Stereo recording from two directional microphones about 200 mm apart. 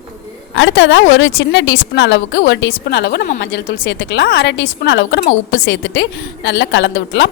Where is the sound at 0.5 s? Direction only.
65° left (ahead or behind).